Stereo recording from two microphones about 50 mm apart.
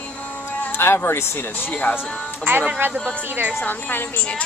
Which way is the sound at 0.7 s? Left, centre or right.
Left.